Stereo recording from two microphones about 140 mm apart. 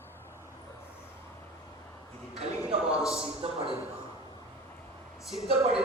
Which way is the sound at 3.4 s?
45° right (ahead or behind).